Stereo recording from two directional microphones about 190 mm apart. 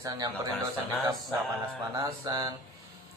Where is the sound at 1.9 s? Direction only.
20° right (ahead or behind).